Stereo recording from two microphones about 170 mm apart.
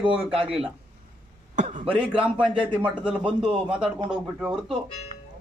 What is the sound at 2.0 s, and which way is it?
Speech, 5° right (ahead or behind).